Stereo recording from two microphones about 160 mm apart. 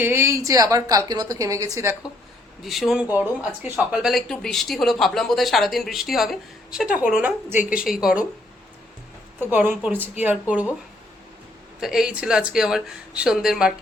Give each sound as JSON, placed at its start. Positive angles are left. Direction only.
{"t": 0.0, "sound": "a woman's voice", "side_deg": -15}
{"t": 2.6, "sound": "speech", "side_deg": 0}
{"t": 9.4, "sound": "speech", "side_deg": -10}
{"t": 11.8, "sound": "speech", "side_deg": -5}